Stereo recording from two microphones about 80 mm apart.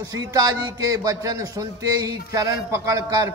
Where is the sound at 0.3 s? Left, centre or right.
Right.